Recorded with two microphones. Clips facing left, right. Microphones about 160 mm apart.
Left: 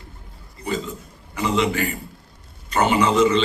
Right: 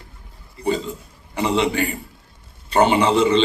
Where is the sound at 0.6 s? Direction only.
30° right (ahead or behind).